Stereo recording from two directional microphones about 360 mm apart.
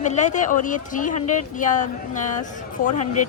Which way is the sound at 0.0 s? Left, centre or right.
Centre.